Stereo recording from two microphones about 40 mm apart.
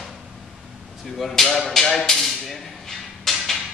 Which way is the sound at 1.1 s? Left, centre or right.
Centre.